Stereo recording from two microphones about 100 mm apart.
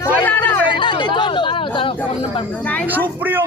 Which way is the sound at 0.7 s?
50° left (ahead or behind).